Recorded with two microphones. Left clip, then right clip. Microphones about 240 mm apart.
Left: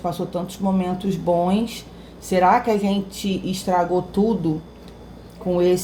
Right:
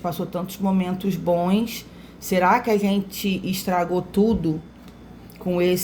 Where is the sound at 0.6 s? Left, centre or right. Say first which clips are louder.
Left 1 dB; right.